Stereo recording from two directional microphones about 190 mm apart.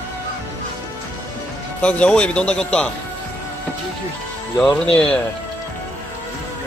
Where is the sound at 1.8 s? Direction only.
5° left (ahead or behind).